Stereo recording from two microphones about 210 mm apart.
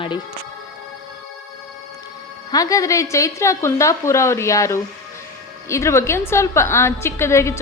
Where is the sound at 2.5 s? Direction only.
15° left (ahead or behind).